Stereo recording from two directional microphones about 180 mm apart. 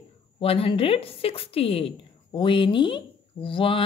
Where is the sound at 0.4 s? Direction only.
30° left (ahead or behind).